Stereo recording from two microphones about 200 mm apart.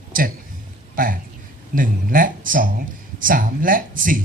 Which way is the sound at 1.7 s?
45° right (ahead or behind).